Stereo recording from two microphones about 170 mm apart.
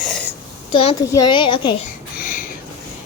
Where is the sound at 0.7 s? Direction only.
35° left (ahead or behind).